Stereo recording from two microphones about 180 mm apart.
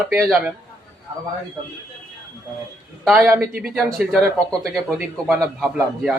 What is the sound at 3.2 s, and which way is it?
Speech, 15° right (ahead or behind).